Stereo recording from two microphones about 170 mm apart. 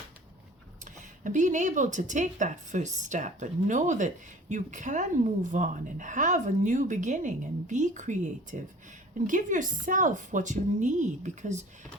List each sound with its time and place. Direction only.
1.2 s speech: 45° right (ahead or behind)